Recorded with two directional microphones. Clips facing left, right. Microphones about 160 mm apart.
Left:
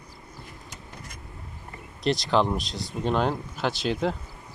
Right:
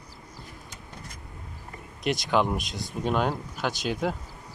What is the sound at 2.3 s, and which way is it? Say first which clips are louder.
Speech: even; 10° right (ahead or behind).